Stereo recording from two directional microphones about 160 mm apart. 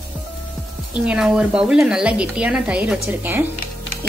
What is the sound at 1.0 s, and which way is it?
A woman's voice, 5° right (ahead or behind).